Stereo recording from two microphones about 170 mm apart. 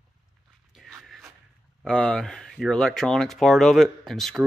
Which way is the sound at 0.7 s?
Centre (ahead or behind).